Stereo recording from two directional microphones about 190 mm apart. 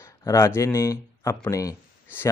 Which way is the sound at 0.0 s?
15° left (ahead or behind).